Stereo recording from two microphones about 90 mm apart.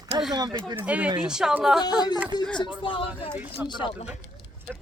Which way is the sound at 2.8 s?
75° left (ahead or behind).